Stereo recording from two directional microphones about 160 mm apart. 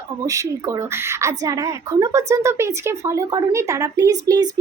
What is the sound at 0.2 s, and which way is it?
A woman's voice, 20° right (ahead or behind).